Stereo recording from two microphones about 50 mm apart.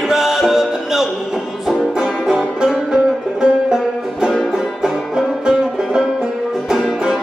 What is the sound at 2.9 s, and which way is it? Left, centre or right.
Music, centre.